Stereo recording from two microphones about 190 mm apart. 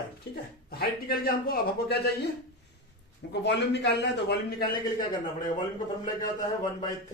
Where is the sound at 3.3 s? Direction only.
65° left (ahead or behind).